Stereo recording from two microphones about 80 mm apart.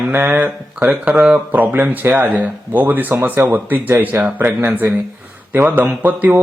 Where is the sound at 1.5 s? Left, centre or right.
Right.